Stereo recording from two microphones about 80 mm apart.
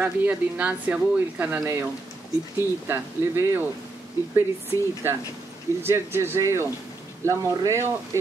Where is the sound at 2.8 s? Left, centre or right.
Right.